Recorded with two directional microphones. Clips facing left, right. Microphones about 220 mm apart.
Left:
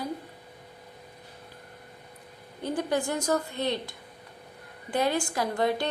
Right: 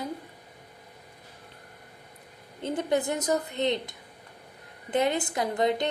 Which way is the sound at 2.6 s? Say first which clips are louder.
Right 1 dB; 20° right (ahead or behind).